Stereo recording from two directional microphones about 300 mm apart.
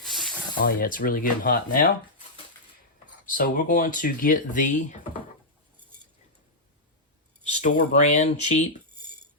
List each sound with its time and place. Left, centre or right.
0.1 s snake: centre
0.8 s speech: left
3.2 s speech: left
7.4 s speech: left